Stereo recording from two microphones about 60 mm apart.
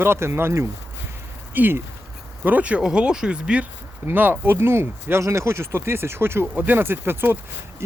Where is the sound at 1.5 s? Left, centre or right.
Right.